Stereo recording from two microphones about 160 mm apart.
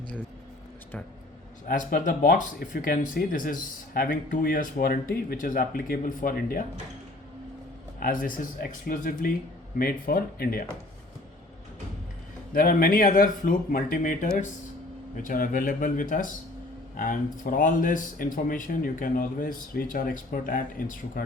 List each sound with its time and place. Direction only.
1.6 s speech: 60° left (ahead or behind)
7.9 s a man's voice: 60° left (ahead or behind)
12.5 s speech: 65° left (ahead or behind)